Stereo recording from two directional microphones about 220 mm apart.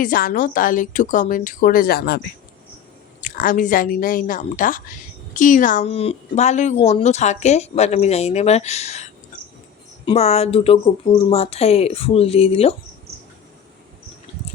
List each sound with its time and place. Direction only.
0.0 s speech: 40° left (ahead or behind)
10.1 s speech: 30° left (ahead or behind)